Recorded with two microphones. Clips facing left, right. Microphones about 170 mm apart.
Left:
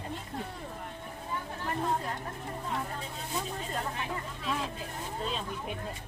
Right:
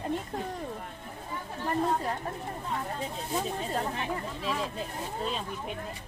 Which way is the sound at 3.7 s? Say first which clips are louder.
Right 2 dB; 30° right (ahead or behind).